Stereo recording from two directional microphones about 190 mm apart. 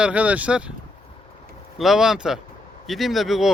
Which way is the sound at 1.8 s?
Centre (ahead or behind).